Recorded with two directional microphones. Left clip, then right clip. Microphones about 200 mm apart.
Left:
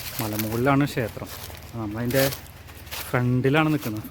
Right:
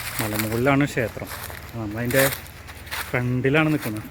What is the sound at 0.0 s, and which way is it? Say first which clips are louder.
Speech: right 3 dB; 5° right (ahead or behind).